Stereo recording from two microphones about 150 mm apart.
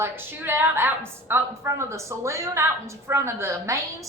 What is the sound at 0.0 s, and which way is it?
A woman's voice, 15° right (ahead or behind).